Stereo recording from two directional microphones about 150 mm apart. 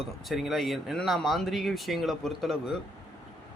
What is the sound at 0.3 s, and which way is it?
Speech, centre (ahead or behind).